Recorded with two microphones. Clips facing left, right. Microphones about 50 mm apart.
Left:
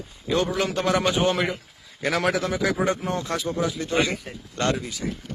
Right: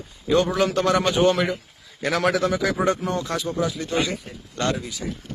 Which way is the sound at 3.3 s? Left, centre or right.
Left.